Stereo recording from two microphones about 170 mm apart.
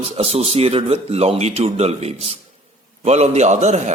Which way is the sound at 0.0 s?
35° right (ahead or behind).